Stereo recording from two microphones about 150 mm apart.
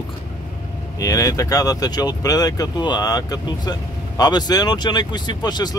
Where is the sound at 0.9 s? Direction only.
25° left (ahead or behind).